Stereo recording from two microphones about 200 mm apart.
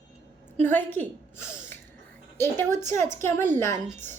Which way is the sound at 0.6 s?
10° left (ahead or behind).